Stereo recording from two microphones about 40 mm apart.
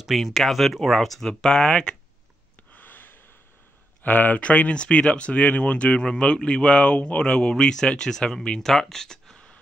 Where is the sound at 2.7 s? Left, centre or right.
Left.